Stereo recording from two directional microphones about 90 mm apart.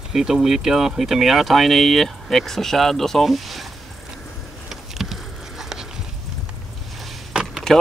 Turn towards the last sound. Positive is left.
turn(degrees=-10)  # may be behind; listen again after turning